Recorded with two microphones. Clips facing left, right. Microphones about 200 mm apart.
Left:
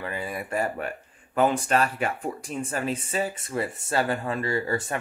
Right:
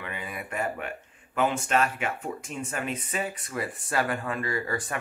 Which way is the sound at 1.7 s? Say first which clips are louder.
Left 2 dB; 35° left (ahead or behind).